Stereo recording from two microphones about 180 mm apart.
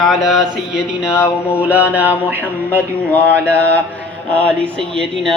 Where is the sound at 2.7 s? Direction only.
10° left (ahead or behind).